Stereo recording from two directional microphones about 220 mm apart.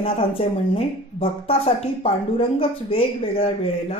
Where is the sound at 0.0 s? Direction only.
25° left (ahead or behind).